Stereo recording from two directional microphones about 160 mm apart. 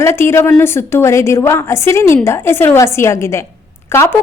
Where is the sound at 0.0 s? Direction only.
15° left (ahead or behind).